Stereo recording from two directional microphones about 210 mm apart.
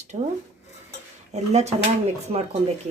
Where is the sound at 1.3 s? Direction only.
30° right (ahead or behind).